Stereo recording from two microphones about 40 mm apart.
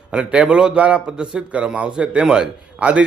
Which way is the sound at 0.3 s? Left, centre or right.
Right.